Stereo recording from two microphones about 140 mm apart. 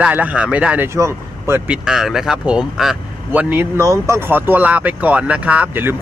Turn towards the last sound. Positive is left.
turn(degrees=-15)  # may be behind; listen again after turning